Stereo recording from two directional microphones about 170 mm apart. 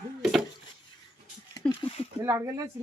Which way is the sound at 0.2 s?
Centre (ahead or behind).